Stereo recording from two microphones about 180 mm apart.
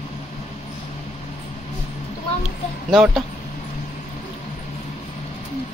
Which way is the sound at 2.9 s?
Centre (ahead or behind).